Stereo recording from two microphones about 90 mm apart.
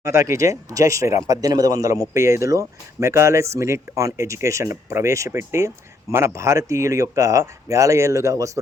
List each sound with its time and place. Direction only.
0.0 s a man's voice: 35° right (ahead or behind)